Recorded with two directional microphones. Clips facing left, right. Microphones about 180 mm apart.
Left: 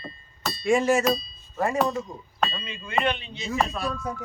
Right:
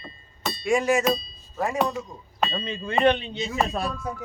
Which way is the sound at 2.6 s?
35° right (ahead or behind).